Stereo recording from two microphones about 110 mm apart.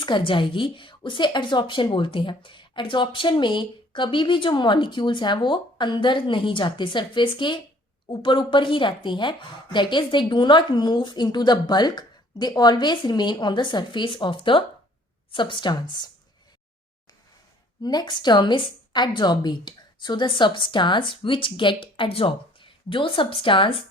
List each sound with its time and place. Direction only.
0.0 s a woman's voice: 45° left (ahead or behind)
17.8 s a woman's voice: 40° left (ahead or behind)